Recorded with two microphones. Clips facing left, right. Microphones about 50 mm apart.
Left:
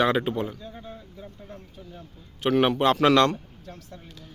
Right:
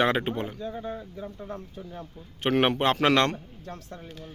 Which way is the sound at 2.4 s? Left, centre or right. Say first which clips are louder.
Left 2 dB; right.